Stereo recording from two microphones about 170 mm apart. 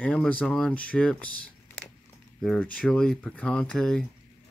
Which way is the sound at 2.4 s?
5° left (ahead or behind).